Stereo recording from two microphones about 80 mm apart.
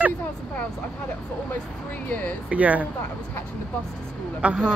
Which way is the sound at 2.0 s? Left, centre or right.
Centre.